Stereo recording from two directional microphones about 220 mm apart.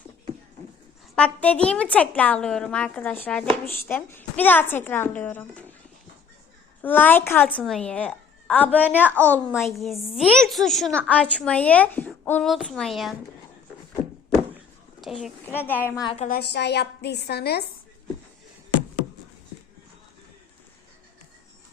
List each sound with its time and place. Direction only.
1.1 s a woman's voice: 5° left (ahead or behind)
6.8 s a woman's voice: 10° left (ahead or behind)
15.0 s a child's voice: centre (ahead or behind)
15.4 s a woman's voice: 10° left (ahead or behind)
16.0 s a woman's voice: 20° left (ahead or behind)
16.2 s a woman's voice: 45° left (ahead or behind)